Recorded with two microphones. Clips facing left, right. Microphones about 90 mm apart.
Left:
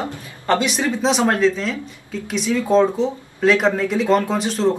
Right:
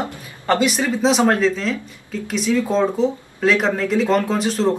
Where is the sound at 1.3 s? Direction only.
Centre (ahead or behind).